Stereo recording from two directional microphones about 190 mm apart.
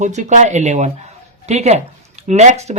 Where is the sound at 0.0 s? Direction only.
40° right (ahead or behind).